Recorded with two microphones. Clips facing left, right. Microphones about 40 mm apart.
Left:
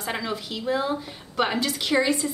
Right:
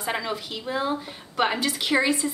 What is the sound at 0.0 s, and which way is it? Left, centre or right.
A woman's voice, centre.